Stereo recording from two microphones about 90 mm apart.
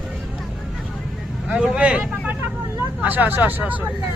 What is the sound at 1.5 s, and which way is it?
Speech, 10° right (ahead or behind).